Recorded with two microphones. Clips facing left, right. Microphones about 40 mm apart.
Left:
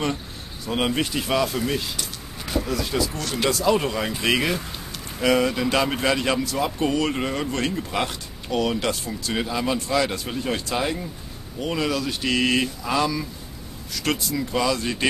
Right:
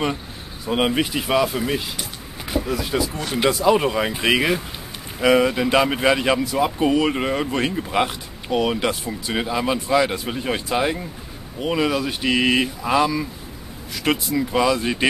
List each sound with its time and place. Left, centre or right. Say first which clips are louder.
0.7 s speech: right 3 dB; centre